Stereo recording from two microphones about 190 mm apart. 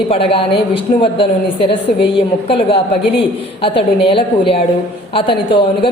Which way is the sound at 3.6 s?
30° left (ahead or behind).